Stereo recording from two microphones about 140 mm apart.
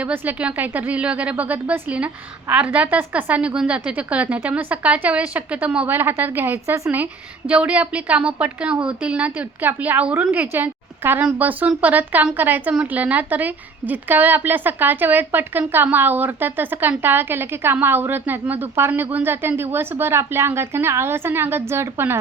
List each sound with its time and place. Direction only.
0.0 s a woman's voice: 10° right (ahead or behind)